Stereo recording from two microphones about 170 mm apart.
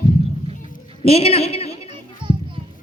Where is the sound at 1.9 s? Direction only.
30° right (ahead or behind).